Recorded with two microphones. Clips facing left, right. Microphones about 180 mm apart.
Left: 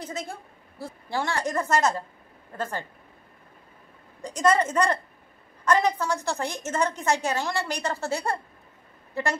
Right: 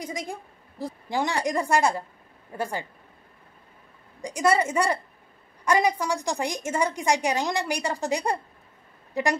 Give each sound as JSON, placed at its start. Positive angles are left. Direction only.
{"t": 0.0, "sound": "a woman's voice", "side_deg": -15}
{"t": 4.2, "sound": "a woman's voice", "side_deg": -10}